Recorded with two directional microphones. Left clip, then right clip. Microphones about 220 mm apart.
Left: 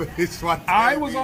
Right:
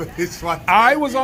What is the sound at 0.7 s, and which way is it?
Music, 55° right (ahead or behind).